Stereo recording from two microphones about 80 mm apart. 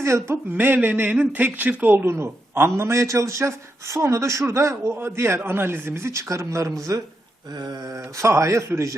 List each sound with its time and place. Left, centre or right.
0.0 s a man's voice: right
0.5 s speech: right
2.0 s a man's voice: right
7.5 s a man's voice: right